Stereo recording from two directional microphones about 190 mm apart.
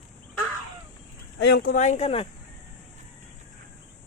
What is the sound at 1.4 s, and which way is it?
Speech, 60° left (ahead or behind).